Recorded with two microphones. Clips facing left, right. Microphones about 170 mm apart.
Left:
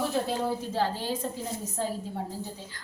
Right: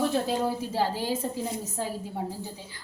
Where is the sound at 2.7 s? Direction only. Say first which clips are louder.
Left 1 dB; 10° right (ahead or behind).